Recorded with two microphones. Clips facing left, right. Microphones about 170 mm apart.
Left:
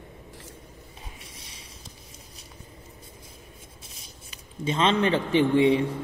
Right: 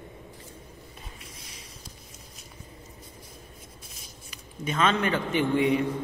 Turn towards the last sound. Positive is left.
turn(degrees=25)  # may be behind; listen again after turning